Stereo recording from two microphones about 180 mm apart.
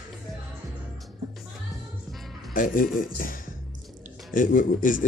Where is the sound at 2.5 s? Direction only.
50° left (ahead or behind).